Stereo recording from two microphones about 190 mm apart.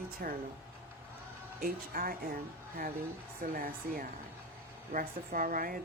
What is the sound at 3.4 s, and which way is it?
Speech, 50° right (ahead or behind).